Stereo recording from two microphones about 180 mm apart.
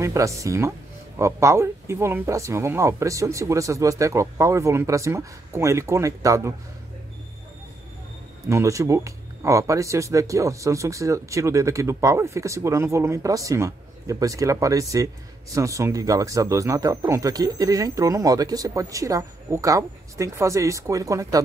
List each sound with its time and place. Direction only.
0.0 s speech: 15° right (ahead or behind)
8.5 s speech: 15° right (ahead or behind)